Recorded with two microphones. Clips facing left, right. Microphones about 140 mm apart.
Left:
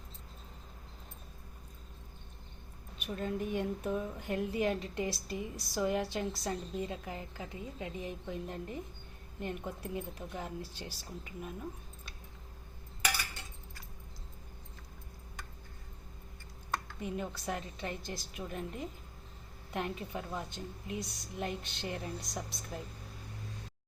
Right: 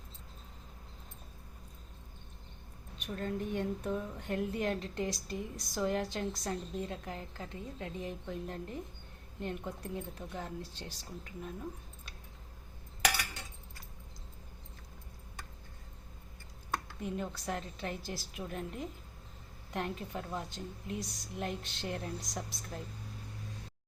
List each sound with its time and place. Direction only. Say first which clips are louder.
3.0 s a woman's voice: left 1 dB; 5° left (ahead or behind)
17.0 s a woman's voice: even; 5° left (ahead or behind)